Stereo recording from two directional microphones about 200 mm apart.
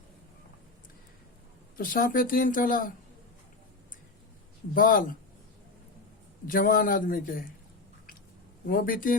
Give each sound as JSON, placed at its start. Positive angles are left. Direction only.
{"t": 1.7, "sound": "speech", "side_deg": 45}
{"t": 4.7, "sound": "speech", "side_deg": 45}
{"t": 6.5, "sound": "speech", "side_deg": 45}
{"t": 8.6, "sound": "speech", "side_deg": 45}